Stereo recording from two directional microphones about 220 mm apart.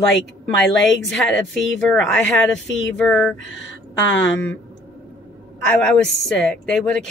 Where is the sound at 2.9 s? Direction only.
5° left (ahead or behind).